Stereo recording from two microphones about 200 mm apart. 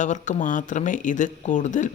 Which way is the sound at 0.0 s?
40° left (ahead or behind).